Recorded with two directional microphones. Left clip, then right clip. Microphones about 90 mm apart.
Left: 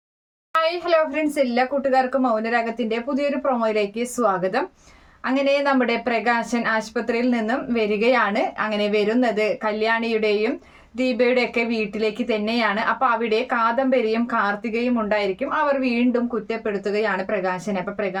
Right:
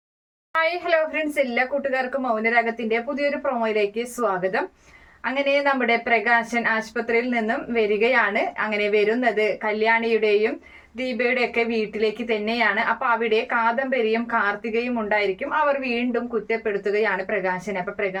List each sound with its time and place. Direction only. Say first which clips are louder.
0.5 s speech: left 2 dB; 40° left (ahead or behind)